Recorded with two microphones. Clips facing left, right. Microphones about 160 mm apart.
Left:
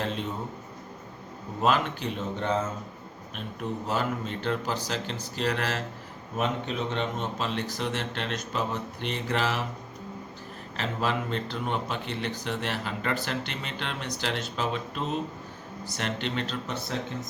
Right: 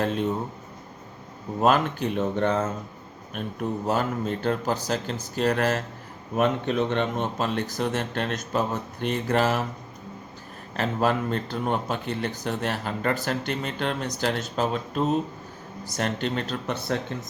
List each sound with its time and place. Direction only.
0.0 s a sound: 50° right (ahead or behind)
1.6 s speech: 50° right (ahead or behind)
3.8 s speech: 45° right (ahead or behind)
6.3 s speech: 60° right (ahead or behind)
10.8 s speech: 45° right (ahead or behind)